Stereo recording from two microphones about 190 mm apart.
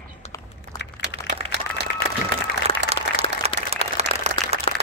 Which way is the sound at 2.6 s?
30° right (ahead or behind).